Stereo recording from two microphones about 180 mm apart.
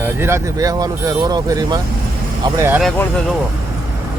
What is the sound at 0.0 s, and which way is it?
Speech, 15° right (ahead or behind).